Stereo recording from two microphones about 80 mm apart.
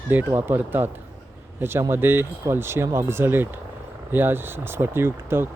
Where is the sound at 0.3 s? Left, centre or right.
Right.